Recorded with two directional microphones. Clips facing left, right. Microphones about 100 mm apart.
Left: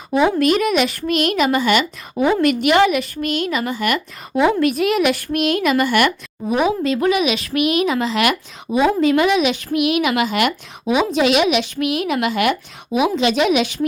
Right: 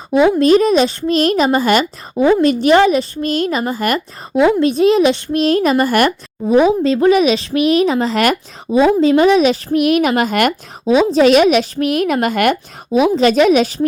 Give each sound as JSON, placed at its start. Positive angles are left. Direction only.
{"t": 0.3, "sound": "speech", "side_deg": -30}
{"t": 4.4, "sound": "speech", "side_deg": -25}
{"t": 8.7, "sound": "a woman's voice", "side_deg": -30}
{"t": 10.8, "sound": "a woman's voice", "side_deg": -30}